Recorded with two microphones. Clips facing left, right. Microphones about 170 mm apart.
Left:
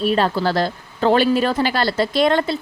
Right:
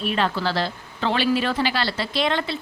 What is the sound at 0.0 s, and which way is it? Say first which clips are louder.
A woman's voice: left 5 dB; 40° left (ahead or behind).